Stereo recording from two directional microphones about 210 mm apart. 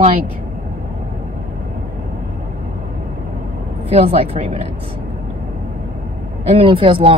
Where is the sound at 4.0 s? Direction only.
30° right (ahead or behind).